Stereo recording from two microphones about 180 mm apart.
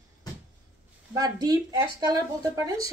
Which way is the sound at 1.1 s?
20° right (ahead or behind).